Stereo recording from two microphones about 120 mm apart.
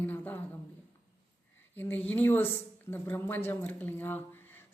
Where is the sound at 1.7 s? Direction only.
15° left (ahead or behind).